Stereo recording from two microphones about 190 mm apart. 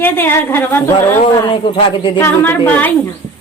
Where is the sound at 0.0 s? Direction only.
10° left (ahead or behind).